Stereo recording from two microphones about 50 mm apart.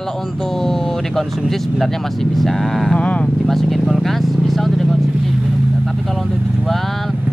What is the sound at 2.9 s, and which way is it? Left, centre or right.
Speech, left.